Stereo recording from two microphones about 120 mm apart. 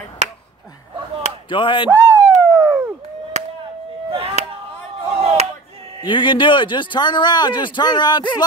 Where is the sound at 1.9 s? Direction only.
20° right (ahead or behind).